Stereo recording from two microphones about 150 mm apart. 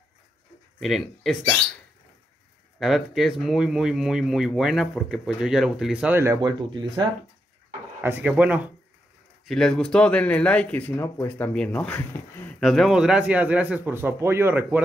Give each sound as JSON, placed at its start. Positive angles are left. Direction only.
{"t": 0.7, "sound": "speech", "side_deg": 0}
{"t": 2.8, "sound": "speech", "side_deg": 0}
{"t": 6.4, "sound": "speech", "side_deg": -30}
{"t": 8.0, "sound": "speech", "side_deg": -10}
{"t": 9.5, "sound": "speech", "side_deg": 5}